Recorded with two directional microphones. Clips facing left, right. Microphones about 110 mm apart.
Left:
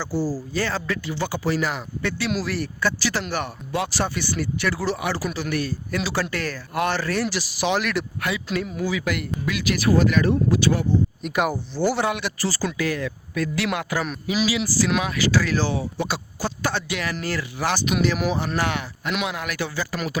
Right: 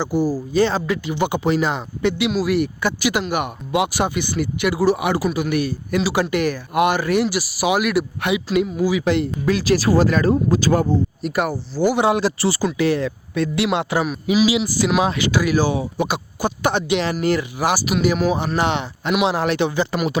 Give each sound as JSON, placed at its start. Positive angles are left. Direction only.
{"t": 0.0, "sound": "speech", "side_deg": -15}
{"t": 9.0, "sound": "speech", "side_deg": -25}
{"t": 9.5, "sound": "speech", "side_deg": -35}
{"t": 11.2, "sound": "speech", "side_deg": 0}
{"t": 11.8, "sound": "speech", "side_deg": -10}
{"t": 12.0, "sound": "speech", "side_deg": -30}
{"t": 18.3, "sound": "speech", "side_deg": -20}